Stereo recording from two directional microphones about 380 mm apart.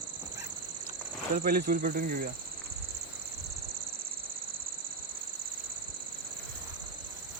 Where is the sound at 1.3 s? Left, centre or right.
Right.